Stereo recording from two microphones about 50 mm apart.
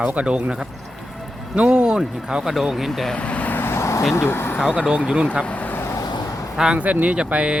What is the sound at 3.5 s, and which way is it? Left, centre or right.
Vehicle, left.